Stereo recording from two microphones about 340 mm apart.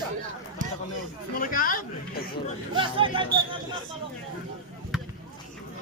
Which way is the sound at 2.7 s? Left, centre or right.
Centre.